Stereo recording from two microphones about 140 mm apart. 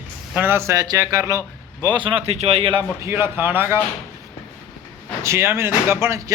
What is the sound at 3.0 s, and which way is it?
Speech, 15° right (ahead or behind).